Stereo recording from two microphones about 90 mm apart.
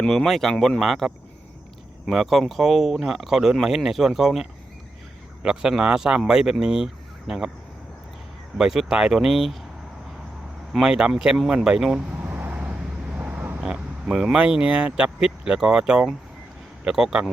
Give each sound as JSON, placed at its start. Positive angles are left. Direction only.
{"t": 0.0, "sound": "speech", "side_deg": 5}
{"t": 8.5, "sound": "speech", "side_deg": -5}
{"t": 10.7, "sound": "speech", "side_deg": -5}
{"t": 12.1, "sound": "vehicle", "side_deg": -20}
{"t": 13.6, "sound": "speech", "side_deg": -10}